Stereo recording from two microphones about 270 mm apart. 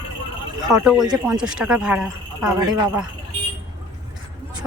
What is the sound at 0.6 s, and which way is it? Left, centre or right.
Speech, centre.